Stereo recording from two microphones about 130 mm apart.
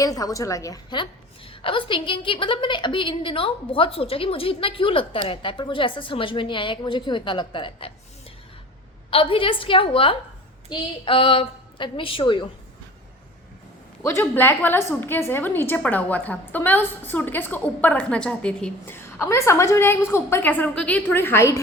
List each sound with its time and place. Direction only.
0.0 s a woman's voice: 30° left (ahead or behind)
9.0 s a woman's voice: 45° left (ahead or behind)
14.0 s a woman's voice: 20° left (ahead or behind)